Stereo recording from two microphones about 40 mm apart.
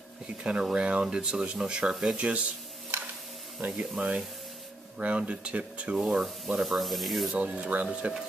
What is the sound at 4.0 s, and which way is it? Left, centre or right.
Speech, right.